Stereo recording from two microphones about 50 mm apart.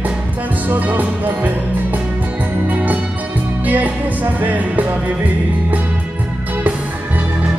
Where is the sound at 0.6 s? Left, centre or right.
Right.